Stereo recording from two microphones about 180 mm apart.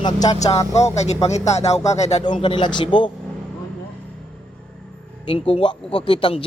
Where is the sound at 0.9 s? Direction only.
35° left (ahead or behind).